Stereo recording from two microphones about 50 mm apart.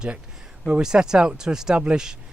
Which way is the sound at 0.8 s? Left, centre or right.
Centre.